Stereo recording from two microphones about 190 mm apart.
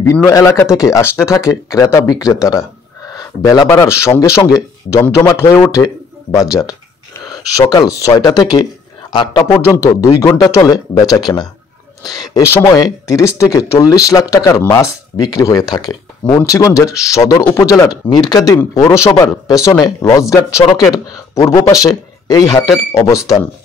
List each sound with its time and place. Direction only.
0.3 s speech: 15° left (ahead or behind)
3.6 s a man's voice: 10° left (ahead or behind)